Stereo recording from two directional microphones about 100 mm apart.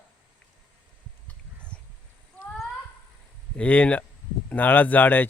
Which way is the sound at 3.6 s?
10° left (ahead or behind).